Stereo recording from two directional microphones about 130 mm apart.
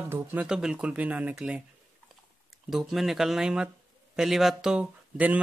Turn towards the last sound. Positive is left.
turn(degrees=-10)  # may be behind; listen again after turning